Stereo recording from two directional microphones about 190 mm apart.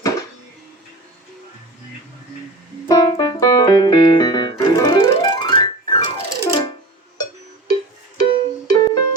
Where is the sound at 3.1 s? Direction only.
20° left (ahead or behind).